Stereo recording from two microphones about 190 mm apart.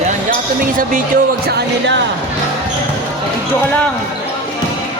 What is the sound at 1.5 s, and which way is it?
Speech, 65° right (ahead or behind).